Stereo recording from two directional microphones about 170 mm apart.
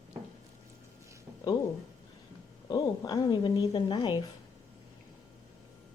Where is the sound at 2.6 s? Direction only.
20° left (ahead or behind).